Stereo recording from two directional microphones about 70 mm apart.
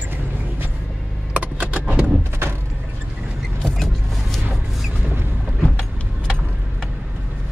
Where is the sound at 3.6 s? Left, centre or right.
Centre.